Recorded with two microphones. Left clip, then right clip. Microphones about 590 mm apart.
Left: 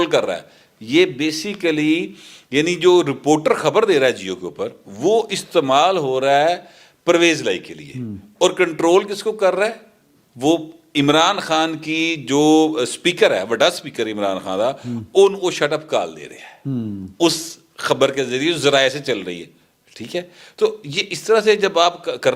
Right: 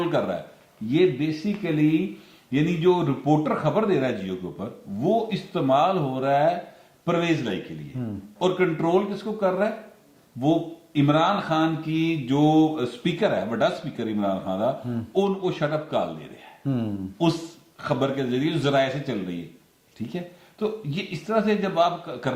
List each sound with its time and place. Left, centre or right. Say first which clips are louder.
0.0 s mantra: left 7 dB; left
0.9 s mantra: left 5 dB; left
10.9 s mantra: left 6 dB; left
17.7 s mantra: left 8 dB; left